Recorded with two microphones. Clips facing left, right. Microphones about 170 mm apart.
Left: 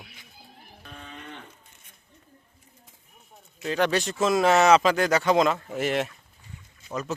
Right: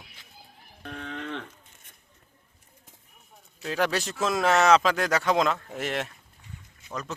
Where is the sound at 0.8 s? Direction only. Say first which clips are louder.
Right 7 dB; 75° right (ahead or behind).